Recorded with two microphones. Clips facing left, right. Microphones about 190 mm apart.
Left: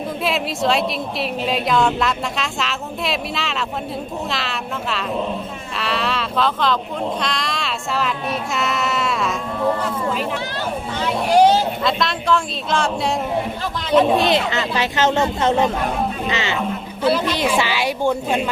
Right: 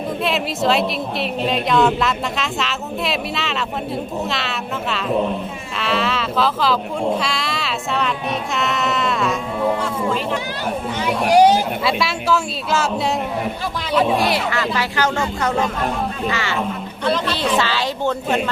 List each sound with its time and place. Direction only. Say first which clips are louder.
0.2 s a woman's voice: even; centre (ahead or behind)
11.0 s speech: right 1 dB; 15° right (ahead or behind)
14.2 s speech: left 1 dB; 20° left (ahead or behind)
17.0 s speech: left 2 dB; 10° left (ahead or behind)